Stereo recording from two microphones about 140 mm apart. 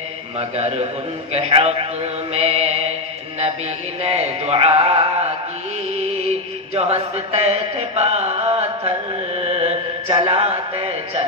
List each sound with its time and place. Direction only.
0.4 s music: 45° right (ahead or behind)
4.0 s music: 45° right (ahead or behind)
5.9 s mantra: 50° right (ahead or behind)
10.2 s music: 45° right (ahead or behind)